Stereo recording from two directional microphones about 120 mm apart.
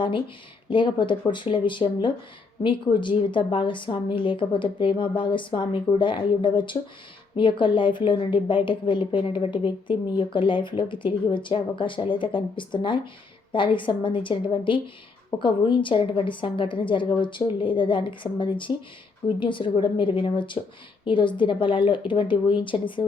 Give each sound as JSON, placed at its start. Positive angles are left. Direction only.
{"t": 0.7, "sound": "speech", "side_deg": 45}